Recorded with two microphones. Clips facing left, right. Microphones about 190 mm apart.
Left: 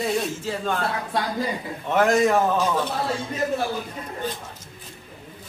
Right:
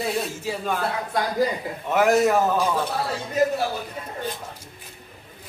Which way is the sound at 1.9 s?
5° right (ahead or behind).